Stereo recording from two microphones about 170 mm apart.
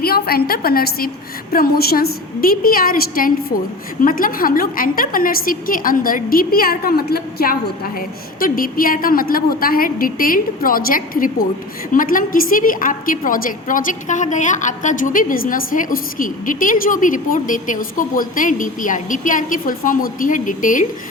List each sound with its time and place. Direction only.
0.0 s a woman's voice: 65° left (ahead or behind)